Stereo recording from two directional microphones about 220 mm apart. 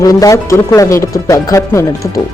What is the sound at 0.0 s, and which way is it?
Speech, 15° left (ahead or behind).